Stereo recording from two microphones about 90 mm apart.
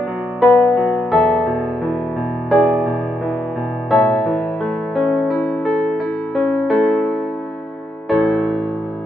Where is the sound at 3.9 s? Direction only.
Centre (ahead or behind).